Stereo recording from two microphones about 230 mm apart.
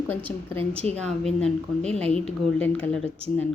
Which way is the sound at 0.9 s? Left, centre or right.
Centre.